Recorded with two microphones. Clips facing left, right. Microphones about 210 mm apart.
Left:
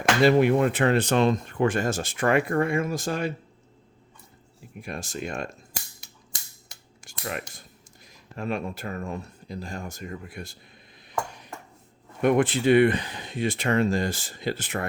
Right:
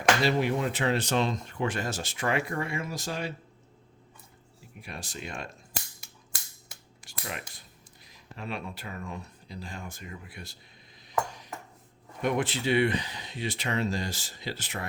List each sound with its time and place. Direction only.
0.2 s speech: 55° left (ahead or behind)
4.8 s speech: 45° left (ahead or behind)
7.0 s a sound: 50° left (ahead or behind)
8.0 s speech: 45° left (ahead or behind)
11.3 s ping: 60° left (ahead or behind)
12.2 s speech: 50° left (ahead or behind)